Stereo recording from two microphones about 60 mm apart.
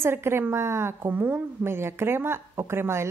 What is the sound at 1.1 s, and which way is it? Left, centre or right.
A woman's voice, right.